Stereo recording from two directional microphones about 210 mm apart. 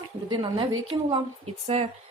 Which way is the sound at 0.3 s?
25° right (ahead or behind).